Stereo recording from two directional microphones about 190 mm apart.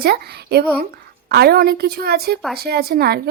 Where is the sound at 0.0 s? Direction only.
55° right (ahead or behind).